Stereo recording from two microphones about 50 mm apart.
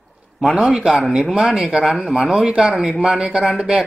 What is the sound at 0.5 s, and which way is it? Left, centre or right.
Mantra, centre.